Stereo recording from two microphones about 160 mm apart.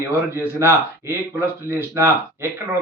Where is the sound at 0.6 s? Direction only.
15° right (ahead or behind).